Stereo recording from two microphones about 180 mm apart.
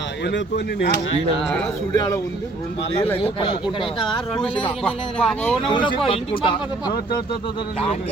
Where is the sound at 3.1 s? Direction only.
30° left (ahead or behind).